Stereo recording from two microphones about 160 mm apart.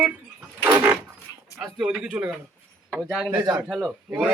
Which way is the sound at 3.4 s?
20° right (ahead or behind).